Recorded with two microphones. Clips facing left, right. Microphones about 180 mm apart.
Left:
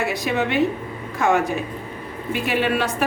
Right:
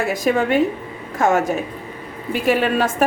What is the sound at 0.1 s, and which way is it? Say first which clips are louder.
A woman's voice: right 4 dB; 45° right (ahead or behind).